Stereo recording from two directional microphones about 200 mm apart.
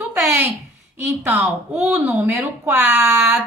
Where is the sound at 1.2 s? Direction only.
Centre (ahead or behind).